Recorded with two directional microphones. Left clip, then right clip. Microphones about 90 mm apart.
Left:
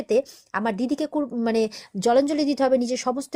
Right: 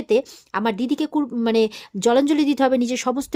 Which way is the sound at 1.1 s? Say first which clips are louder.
Right 3 dB; 35° right (ahead or behind).